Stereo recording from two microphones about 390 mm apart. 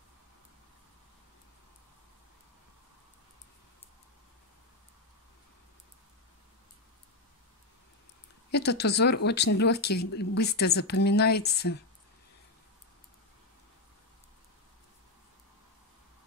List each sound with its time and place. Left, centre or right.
8.5 s speech: left